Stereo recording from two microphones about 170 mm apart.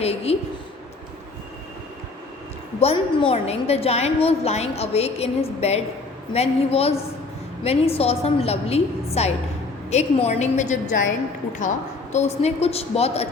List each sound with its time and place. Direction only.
0.0 s a sound: 35° left (ahead or behind)
2.8 s a woman's voice: 35° left (ahead or behind)
12.1 s a woman's voice: 40° left (ahead or behind)